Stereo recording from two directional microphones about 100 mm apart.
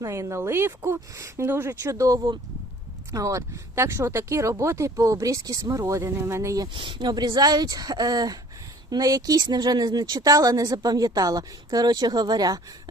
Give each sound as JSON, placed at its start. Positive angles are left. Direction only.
{"t": 0.0, "sound": "a woman's voice", "side_deg": -30}
{"t": 6.7, "sound": "a woman's voice", "side_deg": -50}